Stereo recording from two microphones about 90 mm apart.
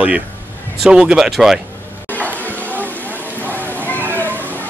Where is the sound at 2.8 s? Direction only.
20° left (ahead or behind).